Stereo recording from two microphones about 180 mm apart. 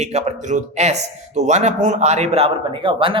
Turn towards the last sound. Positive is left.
turn(degrees=-30)  # may be behind; listen again after turning